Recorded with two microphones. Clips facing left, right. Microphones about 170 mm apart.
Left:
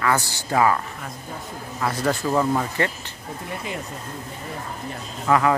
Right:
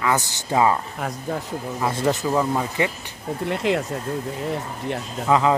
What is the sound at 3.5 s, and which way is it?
Speech, 80° right.